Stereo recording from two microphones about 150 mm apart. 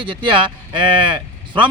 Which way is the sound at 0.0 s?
35° right (ahead or behind).